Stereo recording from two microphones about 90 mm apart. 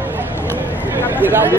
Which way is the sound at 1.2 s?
25° right (ahead or behind).